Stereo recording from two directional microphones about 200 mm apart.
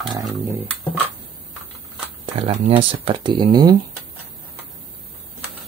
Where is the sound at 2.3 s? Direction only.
30° right (ahead or behind).